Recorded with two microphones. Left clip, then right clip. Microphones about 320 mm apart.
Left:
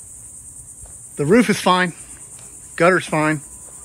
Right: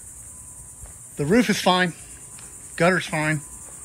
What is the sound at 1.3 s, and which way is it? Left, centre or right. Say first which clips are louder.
Speech: left 4 dB; left.